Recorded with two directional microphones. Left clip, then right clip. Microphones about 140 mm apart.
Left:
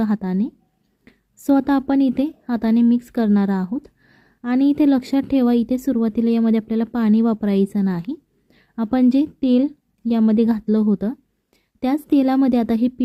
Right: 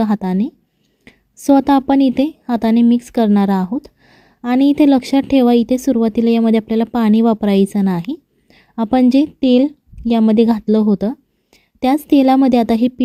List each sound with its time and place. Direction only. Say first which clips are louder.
0.0 s a woman's voice: right 5 dB; 35° right (ahead or behind)